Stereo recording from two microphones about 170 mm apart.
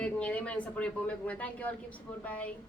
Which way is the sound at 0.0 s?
5° left (ahead or behind).